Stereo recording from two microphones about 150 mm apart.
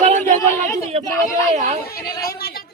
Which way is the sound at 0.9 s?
40° right (ahead or behind).